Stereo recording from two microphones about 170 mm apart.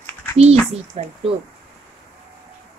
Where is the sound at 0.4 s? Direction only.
40° right (ahead or behind).